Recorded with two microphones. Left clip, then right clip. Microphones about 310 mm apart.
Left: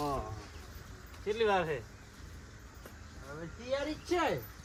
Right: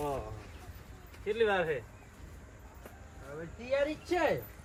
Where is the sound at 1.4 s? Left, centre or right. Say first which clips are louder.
Even; left.